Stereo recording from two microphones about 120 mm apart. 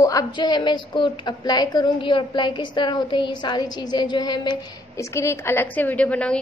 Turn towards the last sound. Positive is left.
turn(degrees=10)  # may be behind; listen again after turning